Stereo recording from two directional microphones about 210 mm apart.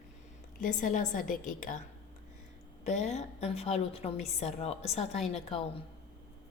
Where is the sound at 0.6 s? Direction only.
35° left (ahead or behind).